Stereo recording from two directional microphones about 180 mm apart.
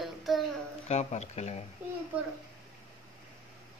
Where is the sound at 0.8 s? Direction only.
40° left (ahead or behind).